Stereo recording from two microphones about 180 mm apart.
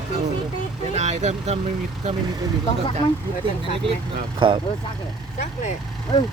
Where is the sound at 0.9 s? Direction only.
40° right (ahead or behind).